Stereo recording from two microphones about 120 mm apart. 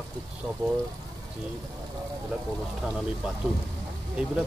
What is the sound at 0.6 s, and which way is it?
Speech, 25° right (ahead or behind).